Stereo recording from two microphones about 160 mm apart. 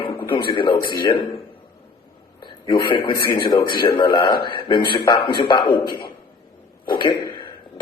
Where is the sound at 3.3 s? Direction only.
25° left (ahead or behind).